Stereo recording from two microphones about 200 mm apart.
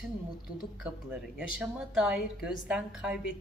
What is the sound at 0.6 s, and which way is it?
A woman's voice, 5° right (ahead or behind).